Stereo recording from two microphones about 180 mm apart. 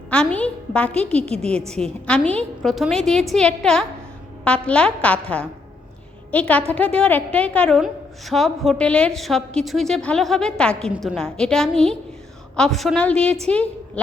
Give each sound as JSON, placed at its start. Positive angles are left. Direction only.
{"t": 0.1, "sound": "a woman's voice", "side_deg": 5}
{"t": 1.2, "sound": "a woman's voice", "side_deg": -35}
{"t": 1.7, "sound": "a woman's voice", "side_deg": 5}